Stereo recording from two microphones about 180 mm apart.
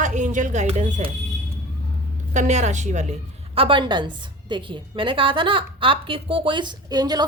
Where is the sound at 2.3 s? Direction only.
40° right (ahead or behind).